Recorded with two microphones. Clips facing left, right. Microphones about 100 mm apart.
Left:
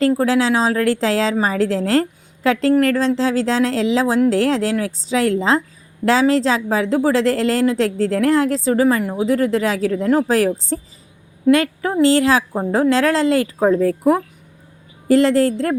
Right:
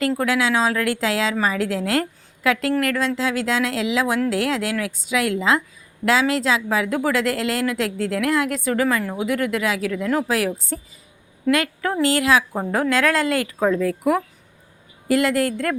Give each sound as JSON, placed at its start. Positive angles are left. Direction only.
{"t": 0.2, "sound": "a woman's voice", "side_deg": 30}